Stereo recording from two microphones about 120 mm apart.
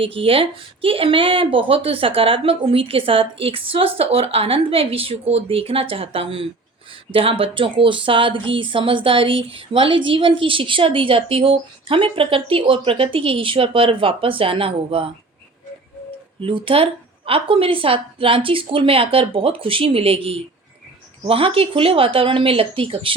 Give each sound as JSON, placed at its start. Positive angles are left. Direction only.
{"t": 0.0, "sound": "a woman's voice", "side_deg": -50}
{"t": 16.4, "sound": "a woman's voice", "side_deg": -45}